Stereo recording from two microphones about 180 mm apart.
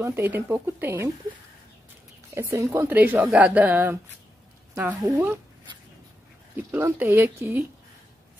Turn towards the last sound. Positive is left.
turn(degrees=-10)  # may be behind; listen again after turning